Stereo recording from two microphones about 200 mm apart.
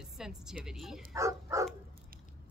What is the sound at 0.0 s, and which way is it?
Music, 5° right (ahead or behind).